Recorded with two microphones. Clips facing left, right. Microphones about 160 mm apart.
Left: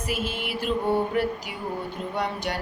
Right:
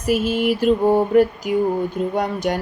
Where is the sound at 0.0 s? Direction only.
40° right (ahead or behind).